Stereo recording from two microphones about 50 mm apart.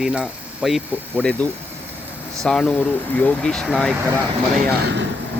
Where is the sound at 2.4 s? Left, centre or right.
Centre.